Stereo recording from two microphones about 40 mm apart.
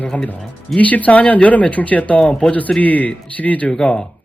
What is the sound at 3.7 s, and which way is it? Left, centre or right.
Speech, left.